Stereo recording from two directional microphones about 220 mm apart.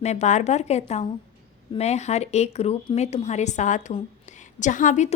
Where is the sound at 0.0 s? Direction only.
30° left (ahead or behind).